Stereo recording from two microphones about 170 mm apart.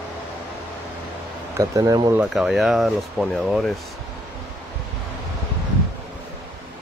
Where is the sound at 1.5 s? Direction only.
20° right (ahead or behind).